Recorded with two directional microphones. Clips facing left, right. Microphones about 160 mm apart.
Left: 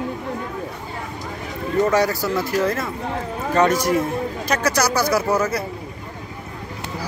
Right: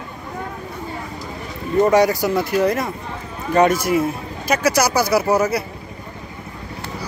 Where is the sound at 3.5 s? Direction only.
10° right (ahead or behind).